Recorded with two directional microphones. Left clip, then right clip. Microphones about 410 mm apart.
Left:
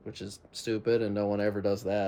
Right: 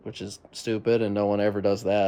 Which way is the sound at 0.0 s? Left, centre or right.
Centre.